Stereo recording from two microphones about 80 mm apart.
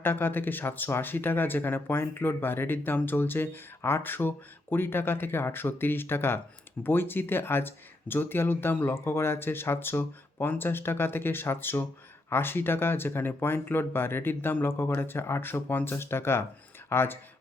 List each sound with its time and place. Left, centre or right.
0.0 s speech: left